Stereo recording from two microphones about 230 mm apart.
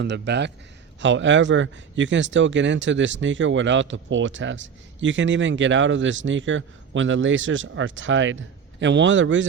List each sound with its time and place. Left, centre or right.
0.0 s a man's voice: right